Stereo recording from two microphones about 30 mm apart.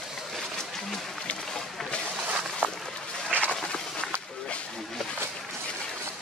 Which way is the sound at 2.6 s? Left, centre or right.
Right.